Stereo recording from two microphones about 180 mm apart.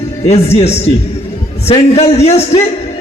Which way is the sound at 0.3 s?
35° left (ahead or behind).